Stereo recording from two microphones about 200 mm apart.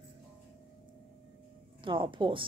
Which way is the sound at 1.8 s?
25° right (ahead or behind).